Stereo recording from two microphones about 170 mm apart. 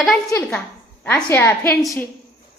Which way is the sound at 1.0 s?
10° left (ahead or behind).